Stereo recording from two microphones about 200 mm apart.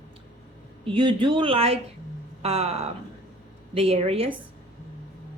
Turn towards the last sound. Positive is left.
turn(degrees=-30)  # may be behind; listen again after turning